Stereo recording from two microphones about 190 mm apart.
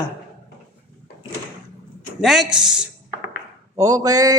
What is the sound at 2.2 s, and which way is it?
Speech, centre (ahead or behind).